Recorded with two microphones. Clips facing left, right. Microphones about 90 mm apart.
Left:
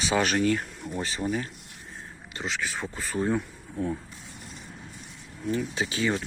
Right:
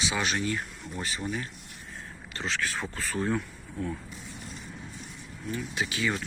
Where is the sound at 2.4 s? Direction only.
10° left (ahead or behind).